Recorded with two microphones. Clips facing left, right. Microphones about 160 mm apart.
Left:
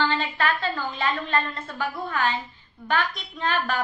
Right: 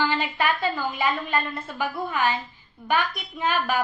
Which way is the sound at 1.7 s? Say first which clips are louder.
Right 1 dB; 20° right (ahead or behind).